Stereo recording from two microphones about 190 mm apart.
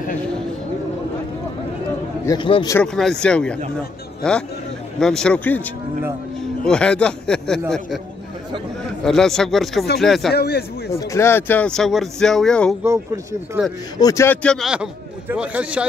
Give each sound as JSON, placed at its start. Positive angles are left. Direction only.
{"t": 2.2, "sound": "a man's voice", "side_deg": 25}
{"t": 2.7, "sound": "a man's voice", "side_deg": 5}
{"t": 6.6, "sound": "speech", "side_deg": 5}
{"t": 9.0, "sound": "speech", "side_deg": 0}
{"t": 10.3, "sound": "a man's voice", "side_deg": 55}
{"t": 10.9, "sound": "speech", "side_deg": 15}
{"t": 12.8, "sound": "speech", "side_deg": -15}
{"t": 13.9, "sound": "speech", "side_deg": 15}